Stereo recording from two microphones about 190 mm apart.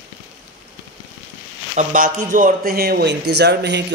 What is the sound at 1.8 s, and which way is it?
Speech, 45° right (ahead or behind).